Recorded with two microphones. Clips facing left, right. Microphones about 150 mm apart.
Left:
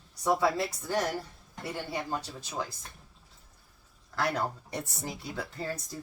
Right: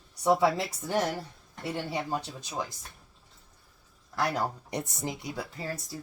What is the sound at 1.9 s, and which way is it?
Speech, 20° right (ahead or behind).